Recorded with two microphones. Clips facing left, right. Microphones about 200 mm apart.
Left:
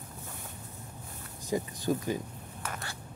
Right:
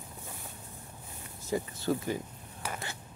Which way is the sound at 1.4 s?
15° left (ahead or behind).